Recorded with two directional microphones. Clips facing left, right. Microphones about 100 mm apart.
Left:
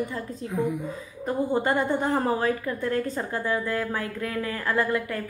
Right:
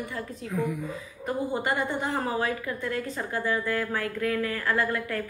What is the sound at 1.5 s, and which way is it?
Speech, 40° left (ahead or behind).